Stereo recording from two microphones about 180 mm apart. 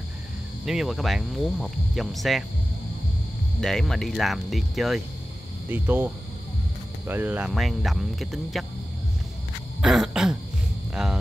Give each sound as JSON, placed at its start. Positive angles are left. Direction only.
{"t": 0.7, "sound": "speech", "side_deg": 0}
{"t": 3.6, "sound": "speech", "side_deg": 0}
{"t": 9.8, "sound": "throat clearing", "side_deg": 0}
{"t": 11.0, "sound": "a sound", "side_deg": -5}